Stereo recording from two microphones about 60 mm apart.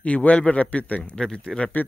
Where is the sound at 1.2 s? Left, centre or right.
Centre.